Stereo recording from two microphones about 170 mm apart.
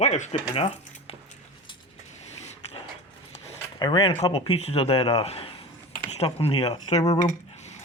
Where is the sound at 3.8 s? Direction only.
30° left (ahead or behind).